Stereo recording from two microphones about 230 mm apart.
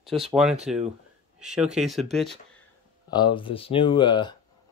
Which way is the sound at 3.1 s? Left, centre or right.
Centre.